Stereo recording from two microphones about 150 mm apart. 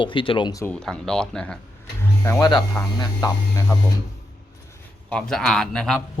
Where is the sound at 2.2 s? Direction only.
20° left (ahead or behind).